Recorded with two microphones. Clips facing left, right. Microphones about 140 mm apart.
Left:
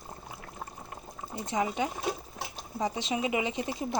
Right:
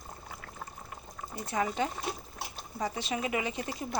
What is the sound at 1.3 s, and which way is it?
Speech, 20° left (ahead or behind).